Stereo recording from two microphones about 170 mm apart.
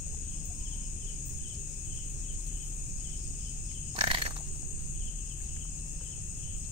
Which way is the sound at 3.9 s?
30° right (ahead or behind).